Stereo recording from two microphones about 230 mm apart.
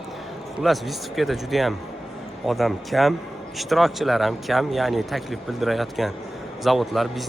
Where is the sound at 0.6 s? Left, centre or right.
Centre.